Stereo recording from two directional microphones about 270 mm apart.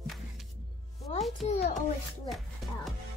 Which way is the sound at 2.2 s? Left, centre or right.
Centre.